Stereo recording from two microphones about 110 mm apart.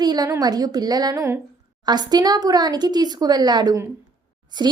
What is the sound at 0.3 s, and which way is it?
A woman's voice, 35° right (ahead or behind).